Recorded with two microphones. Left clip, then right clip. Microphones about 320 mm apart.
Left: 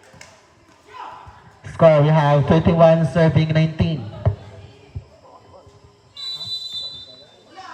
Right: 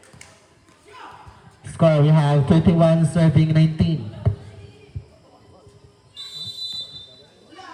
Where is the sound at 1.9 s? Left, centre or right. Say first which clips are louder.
Left 5 dB; left.